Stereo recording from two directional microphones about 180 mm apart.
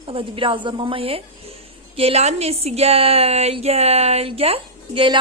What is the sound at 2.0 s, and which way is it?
A woman's voice, 35° right (ahead or behind).